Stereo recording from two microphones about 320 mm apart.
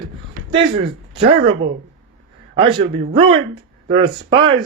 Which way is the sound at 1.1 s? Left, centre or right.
Centre.